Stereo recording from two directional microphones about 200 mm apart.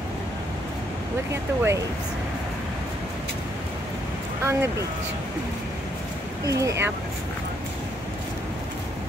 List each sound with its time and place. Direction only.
1.3 s speech: 15° right (ahead or behind)
4.5 s speech: 15° right (ahead or behind)
6.4 s speech: 15° right (ahead or behind)